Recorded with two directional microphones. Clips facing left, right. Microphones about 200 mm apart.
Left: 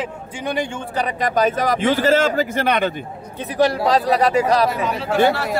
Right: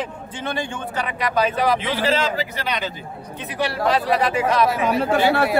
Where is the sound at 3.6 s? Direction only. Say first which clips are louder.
Left 4 dB; 40° left (ahead or behind).